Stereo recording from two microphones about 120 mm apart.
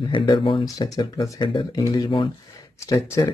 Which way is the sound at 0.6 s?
30° left (ahead or behind).